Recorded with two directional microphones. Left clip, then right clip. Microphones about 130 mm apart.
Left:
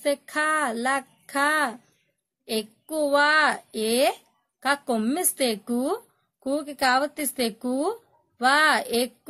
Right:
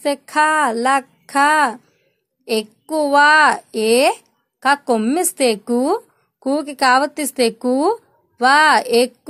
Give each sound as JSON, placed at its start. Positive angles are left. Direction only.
{"t": 0.0, "sound": "a woman's voice", "side_deg": -20}